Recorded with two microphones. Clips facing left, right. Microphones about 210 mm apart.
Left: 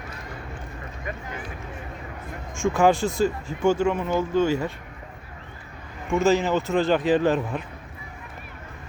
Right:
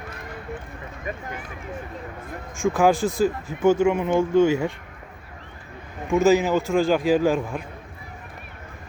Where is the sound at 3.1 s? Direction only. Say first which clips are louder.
Right 1 dB; 10° right (ahead or behind).